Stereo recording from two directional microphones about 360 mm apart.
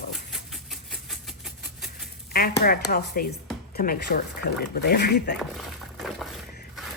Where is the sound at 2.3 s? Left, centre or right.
Left.